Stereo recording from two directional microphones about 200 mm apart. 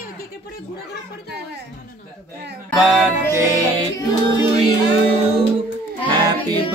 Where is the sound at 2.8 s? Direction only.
5° right (ahead or behind).